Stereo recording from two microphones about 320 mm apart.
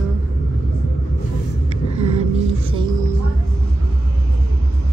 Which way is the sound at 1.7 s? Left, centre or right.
Centre.